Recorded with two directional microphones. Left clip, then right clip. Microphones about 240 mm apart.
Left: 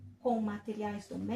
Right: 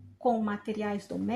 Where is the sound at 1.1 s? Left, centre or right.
Right.